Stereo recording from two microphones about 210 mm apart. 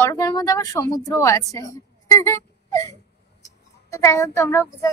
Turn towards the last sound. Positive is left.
turn(degrees=15)  # may be behind; listen again after turning